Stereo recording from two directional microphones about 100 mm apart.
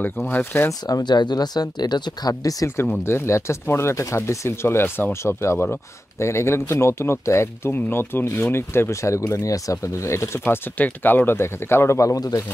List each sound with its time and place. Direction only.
0.0 s speech: 20° left (ahead or behind)
0.8 s speech: 45° left (ahead or behind)
2.8 s speech: 25° left (ahead or behind)